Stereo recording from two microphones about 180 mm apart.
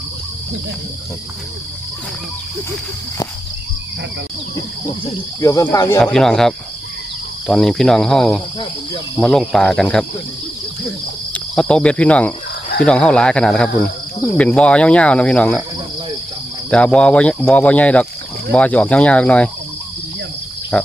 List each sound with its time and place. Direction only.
5.4 s speech: 20° left (ahead or behind)
6.0 s speech: centre (ahead or behind)
11.3 s cricket: 5° left (ahead or behind)
12.8 s speech: 5° left (ahead or behind)
16.6 s speech: 5° left (ahead or behind)
20.7 s speech: 5° left (ahead or behind)